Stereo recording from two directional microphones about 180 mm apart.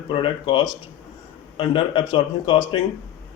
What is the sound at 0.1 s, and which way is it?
A man's voice, 30° left (ahead or behind).